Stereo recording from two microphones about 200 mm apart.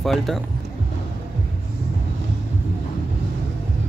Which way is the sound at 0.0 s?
Centre (ahead or behind).